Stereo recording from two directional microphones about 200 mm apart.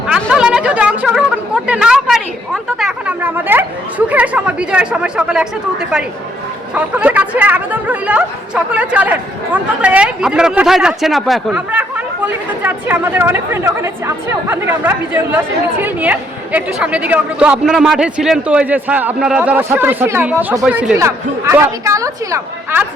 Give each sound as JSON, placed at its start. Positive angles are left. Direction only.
{"t": 0.1, "sound": "a sound", "side_deg": -5}
{"t": 1.6, "sound": "speech", "side_deg": -5}
{"t": 6.7, "sound": "speech", "side_deg": -5}